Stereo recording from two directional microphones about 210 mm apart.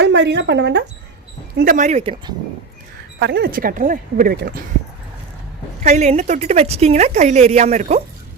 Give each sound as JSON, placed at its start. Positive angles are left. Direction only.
{"t": 0.0, "sound": "speech", "side_deg": -55}
{"t": 1.5, "sound": "a woman's voice", "side_deg": -40}
{"t": 3.2, "sound": "speech", "side_deg": -55}
{"t": 5.8, "sound": "a woman's voice", "side_deg": -30}